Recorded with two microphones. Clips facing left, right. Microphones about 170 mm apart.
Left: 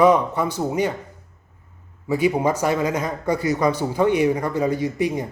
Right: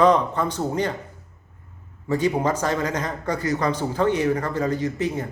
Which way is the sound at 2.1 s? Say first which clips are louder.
Left 2 dB; 10° left (ahead or behind).